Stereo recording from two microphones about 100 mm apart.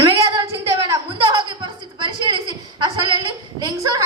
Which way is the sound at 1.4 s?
50° right (ahead or behind).